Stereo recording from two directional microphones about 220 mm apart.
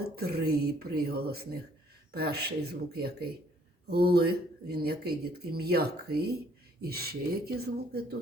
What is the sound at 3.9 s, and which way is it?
Speech, 45° right (ahead or behind).